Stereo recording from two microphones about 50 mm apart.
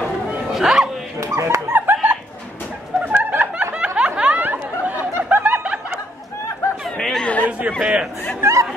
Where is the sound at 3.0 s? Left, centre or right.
Right.